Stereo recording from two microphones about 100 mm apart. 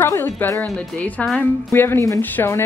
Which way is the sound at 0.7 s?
15° left (ahead or behind).